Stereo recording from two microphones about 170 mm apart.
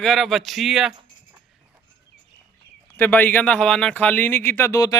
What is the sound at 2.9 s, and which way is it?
Speech, 10° left (ahead or behind).